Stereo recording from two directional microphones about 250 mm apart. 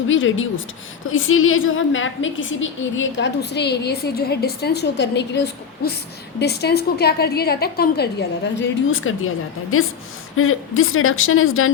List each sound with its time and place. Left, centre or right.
0.1 s a woman's voice: left